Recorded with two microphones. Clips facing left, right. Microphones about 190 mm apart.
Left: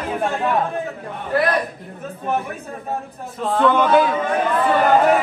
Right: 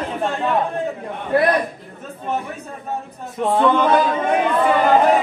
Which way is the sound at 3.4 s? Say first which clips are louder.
Right 1 dB; 20° right (ahead or behind).